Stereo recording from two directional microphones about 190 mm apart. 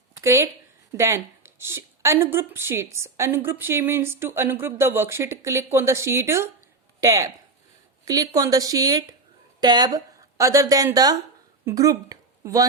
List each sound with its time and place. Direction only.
0.2 s a woman's voice: 15° right (ahead or behind)